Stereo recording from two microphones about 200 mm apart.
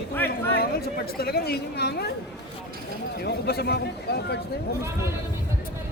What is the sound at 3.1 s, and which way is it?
Speech, 55° left (ahead or behind).